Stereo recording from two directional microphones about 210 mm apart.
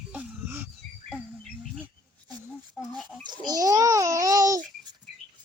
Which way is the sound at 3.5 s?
15° right (ahead or behind).